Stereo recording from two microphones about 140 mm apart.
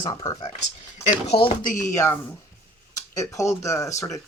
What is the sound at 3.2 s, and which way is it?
Speech, 20° left (ahead or behind).